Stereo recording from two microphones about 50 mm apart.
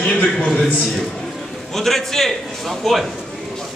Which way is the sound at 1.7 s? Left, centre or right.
Centre.